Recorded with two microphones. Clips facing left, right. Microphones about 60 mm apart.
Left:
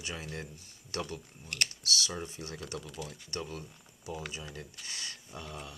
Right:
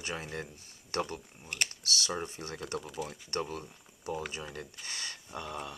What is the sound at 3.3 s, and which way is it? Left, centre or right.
Speech, right.